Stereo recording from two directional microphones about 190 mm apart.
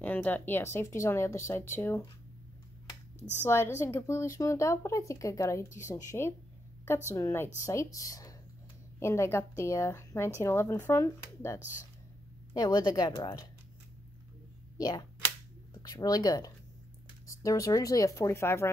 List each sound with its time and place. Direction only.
0.0 s speech: 10° left (ahead or behind)
3.2 s speech: 10° right (ahead or behind)
3.4 s speech: 15° left (ahead or behind)
14.8 s speech: 20° left (ahead or behind)